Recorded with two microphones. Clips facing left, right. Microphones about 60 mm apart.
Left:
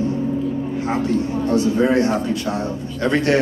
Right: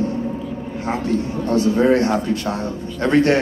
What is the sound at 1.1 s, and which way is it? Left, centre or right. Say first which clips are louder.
Speech: right 1 dB; right.